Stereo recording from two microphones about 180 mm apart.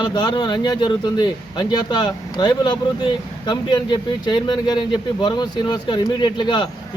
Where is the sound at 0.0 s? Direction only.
25° left (ahead or behind).